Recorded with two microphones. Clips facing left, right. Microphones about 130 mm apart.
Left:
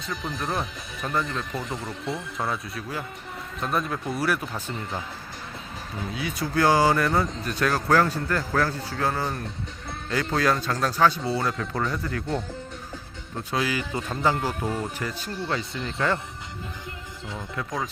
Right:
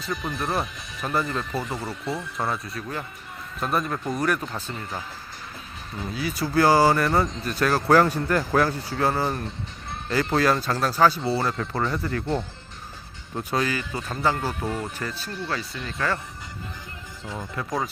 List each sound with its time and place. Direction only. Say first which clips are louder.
0.3 s speech: right 1 dB; 5° right (ahead or behind)
6.1 s speech: right 3 dB; centre (ahead or behind)
13.7 s speech: left 1 dB; 15° left (ahead or behind)
17.5 s speech: right 2 dB; centre (ahead or behind)